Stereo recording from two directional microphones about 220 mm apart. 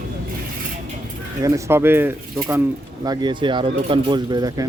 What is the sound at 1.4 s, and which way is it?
Speech, 15° right (ahead or behind).